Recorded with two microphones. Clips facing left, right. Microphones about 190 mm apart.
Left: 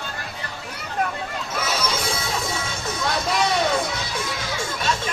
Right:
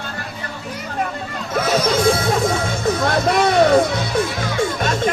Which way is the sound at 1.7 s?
55° right (ahead or behind).